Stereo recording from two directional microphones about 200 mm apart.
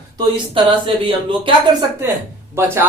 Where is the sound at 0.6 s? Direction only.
25° right (ahead or behind).